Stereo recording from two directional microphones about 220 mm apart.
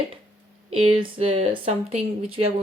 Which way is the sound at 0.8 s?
25° right (ahead or behind).